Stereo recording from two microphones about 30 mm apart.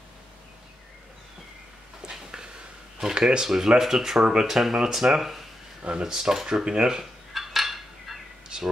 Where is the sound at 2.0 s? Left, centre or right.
Right.